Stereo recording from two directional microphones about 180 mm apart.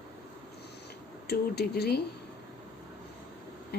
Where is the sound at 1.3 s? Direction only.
65° left (ahead or behind).